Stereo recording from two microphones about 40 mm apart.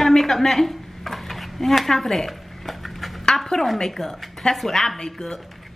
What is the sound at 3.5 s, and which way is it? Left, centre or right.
Speech, centre.